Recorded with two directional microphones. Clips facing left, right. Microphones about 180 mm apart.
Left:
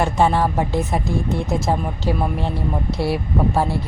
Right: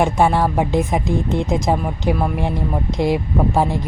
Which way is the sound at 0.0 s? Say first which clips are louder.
Right 2 dB; 10° right (ahead or behind).